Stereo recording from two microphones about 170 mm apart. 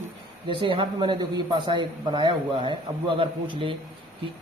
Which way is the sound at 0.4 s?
30° right (ahead or behind).